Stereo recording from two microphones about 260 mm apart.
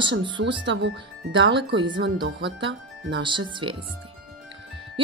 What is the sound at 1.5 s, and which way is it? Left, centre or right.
Speech, centre.